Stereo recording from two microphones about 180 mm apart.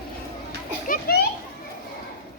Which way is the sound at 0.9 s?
55° left (ahead or behind).